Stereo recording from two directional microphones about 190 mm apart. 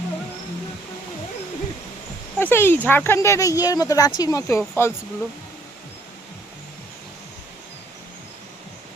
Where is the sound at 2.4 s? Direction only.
10° left (ahead or behind).